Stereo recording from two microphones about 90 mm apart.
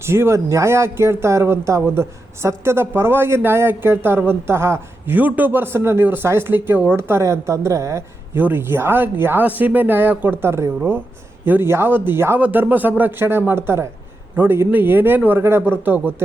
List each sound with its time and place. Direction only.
0.0 s speech: 30° right (ahead or behind)
8.4 s speech: 25° right (ahead or behind)